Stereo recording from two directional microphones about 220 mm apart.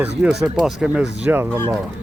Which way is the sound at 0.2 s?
5° right (ahead or behind).